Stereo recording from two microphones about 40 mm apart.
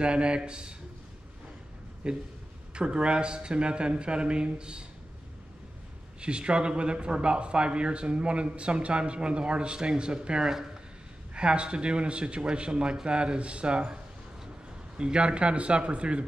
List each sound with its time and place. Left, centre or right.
0.0 s speech: right
2.0 s speech: right
6.2 s speech: right
15.0 s speech: right